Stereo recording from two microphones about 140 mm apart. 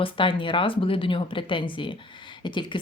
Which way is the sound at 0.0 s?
35° left (ahead or behind).